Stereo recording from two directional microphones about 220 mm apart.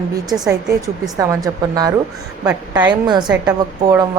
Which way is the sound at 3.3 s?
15° right (ahead or behind).